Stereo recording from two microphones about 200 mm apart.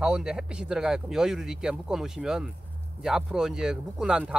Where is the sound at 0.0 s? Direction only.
5° right (ahead or behind).